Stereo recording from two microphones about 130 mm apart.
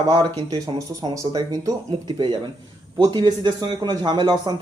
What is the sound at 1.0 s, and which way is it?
Speech, 30° right (ahead or behind).